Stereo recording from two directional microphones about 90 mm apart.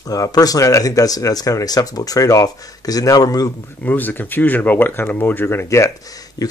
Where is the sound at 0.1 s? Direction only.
45° left (ahead or behind).